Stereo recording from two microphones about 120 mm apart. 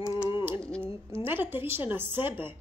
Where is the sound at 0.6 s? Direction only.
10° left (ahead or behind).